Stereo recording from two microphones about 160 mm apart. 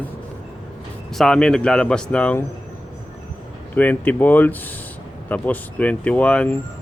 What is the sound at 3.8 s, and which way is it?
Speech, 10° left (ahead or behind).